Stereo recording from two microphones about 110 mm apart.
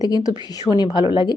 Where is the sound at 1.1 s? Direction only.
45° left (ahead or behind).